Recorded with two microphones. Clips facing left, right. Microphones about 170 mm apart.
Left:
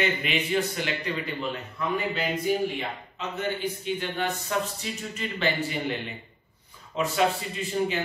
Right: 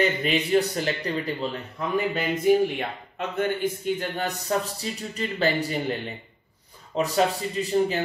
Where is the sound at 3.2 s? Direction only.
50° right (ahead or behind).